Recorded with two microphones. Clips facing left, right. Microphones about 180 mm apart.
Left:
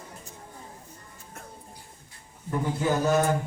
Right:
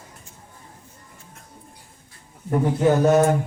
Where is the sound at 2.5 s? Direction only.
60° right (ahead or behind).